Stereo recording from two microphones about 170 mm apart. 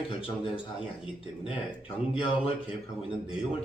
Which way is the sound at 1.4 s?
30° left (ahead or behind).